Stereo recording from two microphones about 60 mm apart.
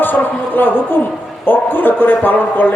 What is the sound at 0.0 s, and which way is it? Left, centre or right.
A man's voice, left.